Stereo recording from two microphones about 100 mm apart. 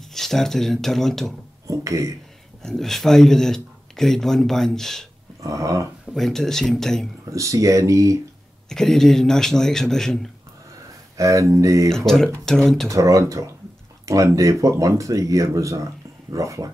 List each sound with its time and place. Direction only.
0.1 s speech: 5° left (ahead or behind)
1.7 s speech: 30° right (ahead or behind)
2.6 s speech: 5° left (ahead or behind)
5.4 s speech: 30° right (ahead or behind)
6.1 s speech: 5° left (ahead or behind)
7.2 s speech: 30° right (ahead or behind)
8.6 s speech: 5° left (ahead or behind)
11.1 s speech: 30° right (ahead or behind)
12.4 s speech: 5° left (ahead or behind)
12.9 s speech: 35° right (ahead or behind)